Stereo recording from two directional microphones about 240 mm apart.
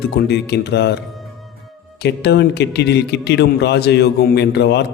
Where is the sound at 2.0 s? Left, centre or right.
Left.